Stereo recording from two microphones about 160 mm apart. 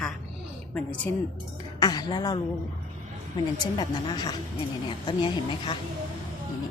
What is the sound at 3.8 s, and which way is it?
Speech, 30° left (ahead or behind).